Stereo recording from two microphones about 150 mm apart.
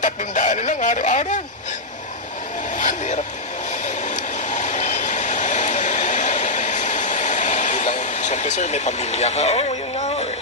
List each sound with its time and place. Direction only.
0.0 s speech: 55° left (ahead or behind)
2.7 s a sound: 55° left (ahead or behind)
3.8 s vehicle: 55° left (ahead or behind)